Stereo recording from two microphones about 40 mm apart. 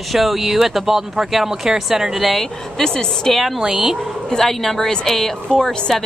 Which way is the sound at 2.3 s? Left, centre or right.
Centre.